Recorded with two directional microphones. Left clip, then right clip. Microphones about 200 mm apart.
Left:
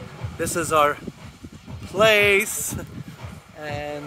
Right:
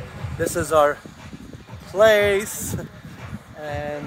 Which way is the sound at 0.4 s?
10° right (ahead or behind).